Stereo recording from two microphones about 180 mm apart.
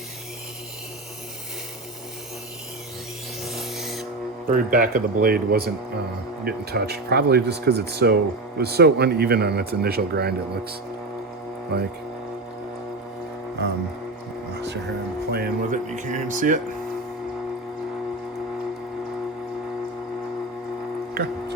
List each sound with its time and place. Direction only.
3.4 s a sound: centre (ahead or behind)
4.4 s speech: 50° right (ahead or behind)
11.7 s speech: 65° right (ahead or behind)
14.6 s speech: 75° right (ahead or behind); by 16.6 s 45° right (ahead or behind)